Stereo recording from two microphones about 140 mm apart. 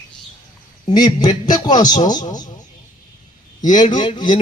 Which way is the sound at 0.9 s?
30° left (ahead or behind).